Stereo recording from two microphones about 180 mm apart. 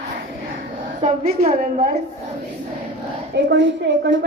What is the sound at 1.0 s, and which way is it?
Speech, 55° right (ahead or behind).